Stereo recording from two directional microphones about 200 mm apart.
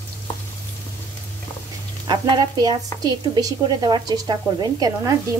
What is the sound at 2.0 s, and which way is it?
A woman's voice, 20° right (ahead or behind).